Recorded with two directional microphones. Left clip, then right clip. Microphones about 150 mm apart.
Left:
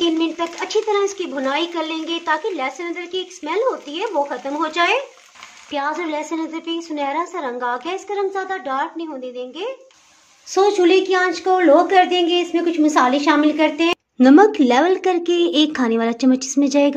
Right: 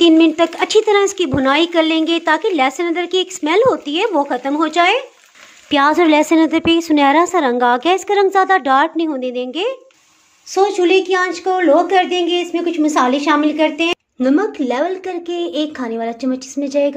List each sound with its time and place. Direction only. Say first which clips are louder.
0.0 s speech: right 9 dB; 60° right (ahead or behind)
10.5 s a woman's voice: right 1 dB; 20° right (ahead or behind)
14.2 s speech: left 5 dB; 30° left (ahead or behind)